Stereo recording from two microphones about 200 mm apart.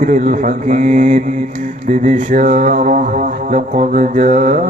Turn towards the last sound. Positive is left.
turn(degrees=-40)  # may be behind; listen again after turning